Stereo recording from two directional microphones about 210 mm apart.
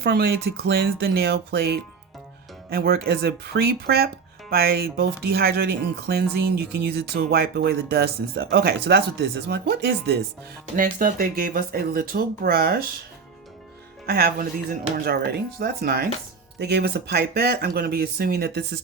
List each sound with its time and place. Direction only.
0.0 s speech: 50° right (ahead or behind)
10.8 s speech: 40° right (ahead or behind)
14.1 s speech: 50° right (ahead or behind)